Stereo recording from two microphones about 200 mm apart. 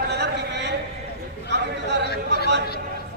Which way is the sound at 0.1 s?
55° right (ahead or behind).